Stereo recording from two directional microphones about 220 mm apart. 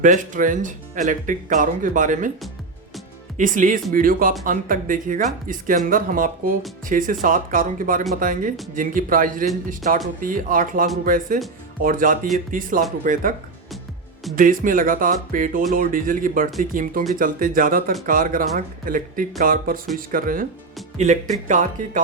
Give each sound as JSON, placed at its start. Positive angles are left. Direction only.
{"t": 0.0, "sound": "speech", "side_deg": -35}
{"t": 3.3, "sound": "speech", "side_deg": -35}
{"t": 14.3, "sound": "speech", "side_deg": -40}